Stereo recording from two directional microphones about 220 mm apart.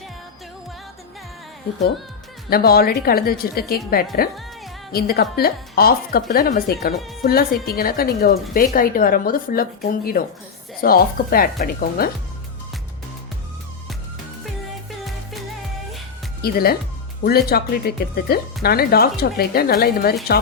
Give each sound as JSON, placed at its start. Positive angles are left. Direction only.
{"t": 2.5, "sound": "speech", "side_deg": 45}
{"t": 14.8, "sound": "music", "side_deg": 0}
{"t": 16.4, "sound": "speech", "side_deg": 45}